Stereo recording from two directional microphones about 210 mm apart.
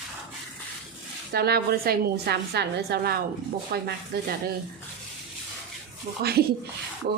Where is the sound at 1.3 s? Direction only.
50° right (ahead or behind).